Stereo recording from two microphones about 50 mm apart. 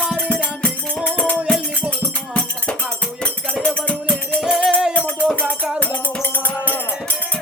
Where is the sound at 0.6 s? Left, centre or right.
Left.